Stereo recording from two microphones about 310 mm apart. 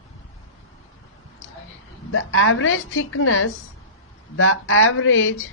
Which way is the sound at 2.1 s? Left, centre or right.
Left.